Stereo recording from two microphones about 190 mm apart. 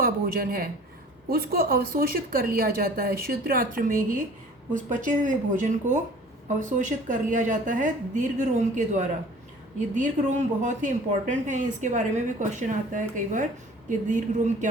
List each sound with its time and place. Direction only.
0.0 s a woman's voice: 50° right (ahead or behind)